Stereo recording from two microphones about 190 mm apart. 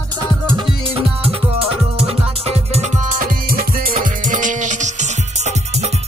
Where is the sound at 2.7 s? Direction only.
40° right (ahead or behind).